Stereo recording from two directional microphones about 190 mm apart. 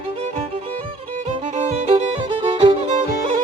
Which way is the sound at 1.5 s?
35° right (ahead or behind).